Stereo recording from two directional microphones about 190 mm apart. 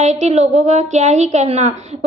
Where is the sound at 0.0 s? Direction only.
35° right (ahead or behind).